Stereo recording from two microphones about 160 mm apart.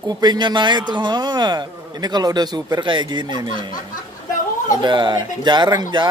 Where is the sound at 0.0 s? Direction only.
25° right (ahead or behind).